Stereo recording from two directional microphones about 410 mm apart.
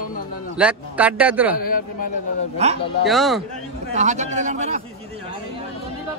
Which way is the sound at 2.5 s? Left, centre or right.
Centre.